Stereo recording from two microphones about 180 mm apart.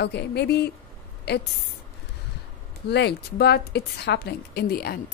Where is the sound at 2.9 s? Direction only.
65° left (ahead or behind).